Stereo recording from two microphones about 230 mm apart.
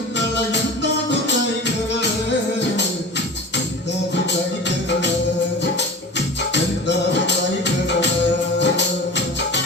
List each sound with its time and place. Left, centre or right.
0.5 s music: left
6.5 s music: left